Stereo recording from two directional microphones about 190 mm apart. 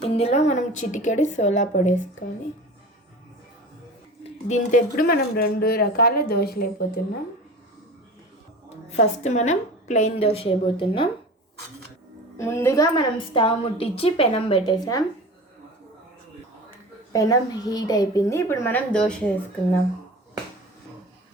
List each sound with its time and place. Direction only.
0.0 s a woman's voice: 30° left (ahead or behind)
4.2 s speech: 40° left (ahead or behind)
8.9 s a woman's voice: 40° left (ahead or behind)
12.4 s a woman's voice: 15° left (ahead or behind)
17.1 s a woman's voice: 20° left (ahead or behind)